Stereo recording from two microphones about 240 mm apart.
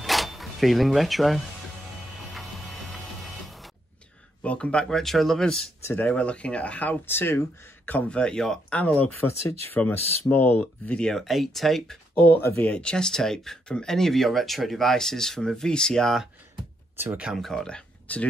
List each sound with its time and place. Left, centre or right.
0.0 s a sound: centre
2.3 s printer: centre
4.4 s speech: centre
12.2 s speech: left
12.4 s speech: centre